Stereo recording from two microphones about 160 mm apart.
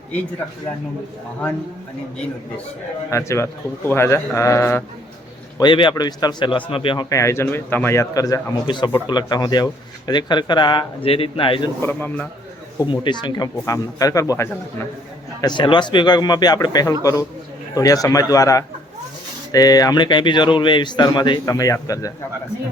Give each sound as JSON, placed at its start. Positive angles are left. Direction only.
{"t": 3.1, "sound": "a man's voice", "side_deg": 15}
{"t": 5.5, "sound": "speech", "side_deg": 30}
{"t": 11.8, "sound": "a man's voice", "side_deg": 15}
{"t": 12.8, "sound": "speech", "side_deg": 30}